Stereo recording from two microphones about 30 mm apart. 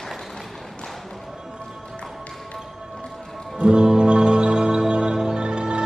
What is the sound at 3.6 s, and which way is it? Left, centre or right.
Music, right.